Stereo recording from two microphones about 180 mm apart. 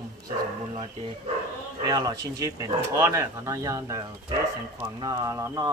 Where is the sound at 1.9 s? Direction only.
20° right (ahead or behind).